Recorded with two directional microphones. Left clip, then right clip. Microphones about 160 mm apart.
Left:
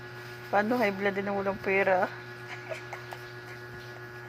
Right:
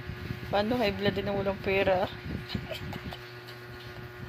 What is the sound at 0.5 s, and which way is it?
Speech, 10° left (ahead or behind).